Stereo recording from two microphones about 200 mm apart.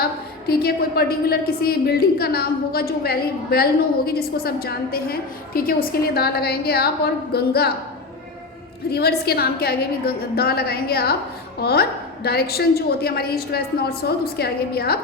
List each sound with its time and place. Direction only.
0.0 s a woman's voice: 50° left (ahead or behind)
8.9 s a woman's voice: 50° left (ahead or behind)